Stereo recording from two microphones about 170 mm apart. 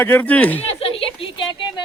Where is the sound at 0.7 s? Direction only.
35° left (ahead or behind).